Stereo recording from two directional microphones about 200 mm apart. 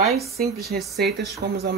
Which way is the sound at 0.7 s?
55° right (ahead or behind).